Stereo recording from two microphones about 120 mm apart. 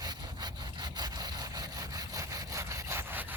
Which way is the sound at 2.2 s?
25° right (ahead or behind).